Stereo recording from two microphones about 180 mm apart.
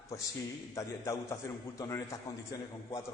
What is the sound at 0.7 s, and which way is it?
A man's voice, 15° left (ahead or behind).